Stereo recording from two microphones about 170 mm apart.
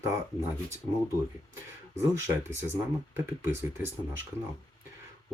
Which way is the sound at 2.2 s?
15° right (ahead or behind).